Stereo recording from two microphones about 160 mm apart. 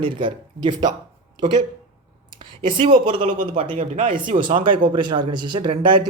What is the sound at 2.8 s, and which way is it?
Speech, 30° right (ahead or behind).